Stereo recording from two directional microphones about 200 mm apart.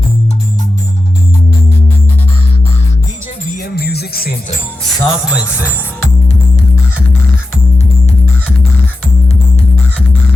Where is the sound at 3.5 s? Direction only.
50° left (ahead or behind).